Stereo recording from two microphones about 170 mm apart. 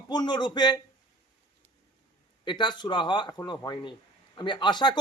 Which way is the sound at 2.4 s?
25° left (ahead or behind).